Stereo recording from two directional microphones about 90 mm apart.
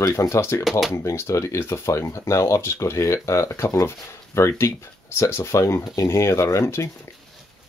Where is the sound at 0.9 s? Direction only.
30° left (ahead or behind).